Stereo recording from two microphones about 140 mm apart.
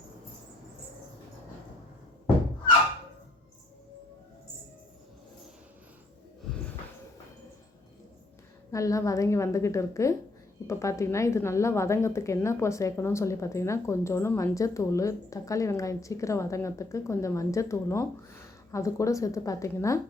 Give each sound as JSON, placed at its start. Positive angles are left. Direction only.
{"t": 8.7, "sound": "a woman's voice", "side_deg": 25}